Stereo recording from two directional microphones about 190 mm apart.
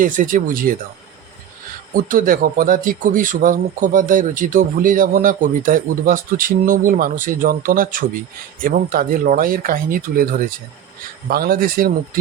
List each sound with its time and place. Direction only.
0.0 s a man's voice: 45° right (ahead or behind)
2.0 s a man's voice: 45° right (ahead or behind)
11.3 s a man's voice: 50° right (ahead or behind)